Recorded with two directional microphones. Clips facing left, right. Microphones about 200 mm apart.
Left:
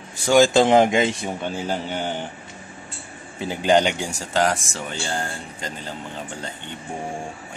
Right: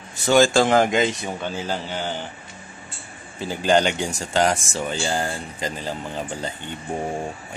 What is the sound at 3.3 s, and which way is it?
Speech, 20° left (ahead or behind).